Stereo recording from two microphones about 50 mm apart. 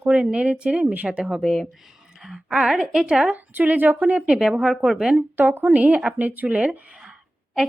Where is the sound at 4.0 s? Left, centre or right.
Right.